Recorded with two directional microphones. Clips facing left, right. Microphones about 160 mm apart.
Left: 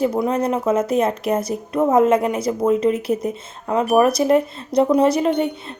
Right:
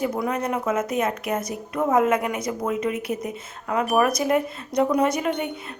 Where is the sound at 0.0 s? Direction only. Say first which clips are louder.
Left 6 dB; 25° left (ahead or behind).